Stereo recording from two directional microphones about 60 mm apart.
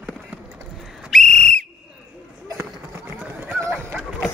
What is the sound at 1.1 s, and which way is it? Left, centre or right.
Whistle, centre.